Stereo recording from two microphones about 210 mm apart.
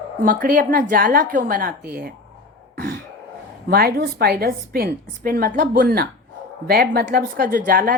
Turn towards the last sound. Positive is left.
turn(degrees=-40)  # may be behind; listen again after turning